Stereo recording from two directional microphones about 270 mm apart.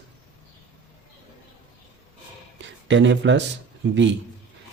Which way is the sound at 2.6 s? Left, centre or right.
Right.